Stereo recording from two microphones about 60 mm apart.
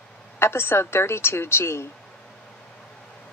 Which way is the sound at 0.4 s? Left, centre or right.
Left.